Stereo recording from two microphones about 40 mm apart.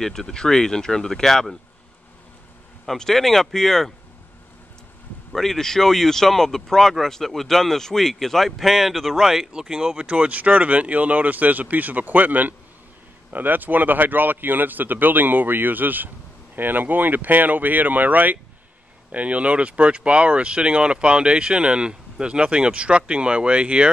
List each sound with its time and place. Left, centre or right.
0.0 s speech: centre
3.0 s speech: centre
5.3 s speech: centre
10.1 s speech: right
19.1 s speech: right